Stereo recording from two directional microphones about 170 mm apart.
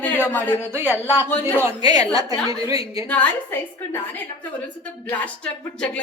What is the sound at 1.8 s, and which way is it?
Speech, 25° right (ahead or behind).